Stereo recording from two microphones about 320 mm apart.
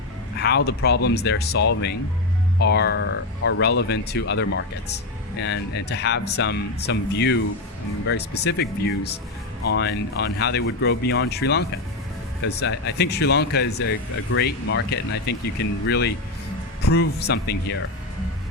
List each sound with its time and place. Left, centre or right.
0.3 s speech: left